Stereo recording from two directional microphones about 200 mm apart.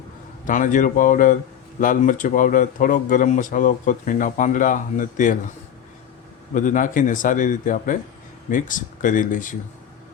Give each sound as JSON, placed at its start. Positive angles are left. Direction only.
{"t": 0.4, "sound": "speech", "side_deg": 40}
{"t": 6.5, "sound": "speech", "side_deg": 40}